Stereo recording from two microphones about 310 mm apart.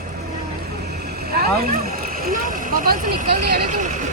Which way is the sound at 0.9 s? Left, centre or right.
Right.